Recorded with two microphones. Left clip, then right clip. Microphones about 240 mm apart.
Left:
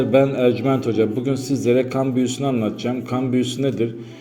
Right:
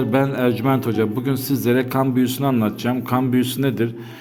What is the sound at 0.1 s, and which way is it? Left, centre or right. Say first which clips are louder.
A man's voice: left 4 dB; right.